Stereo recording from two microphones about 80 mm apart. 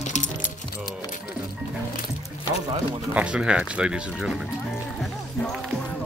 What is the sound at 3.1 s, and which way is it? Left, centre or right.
Speech, centre.